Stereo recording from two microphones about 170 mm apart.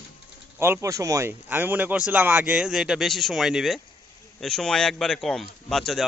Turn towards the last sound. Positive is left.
turn(degrees=0)  # may be behind; listen again after turning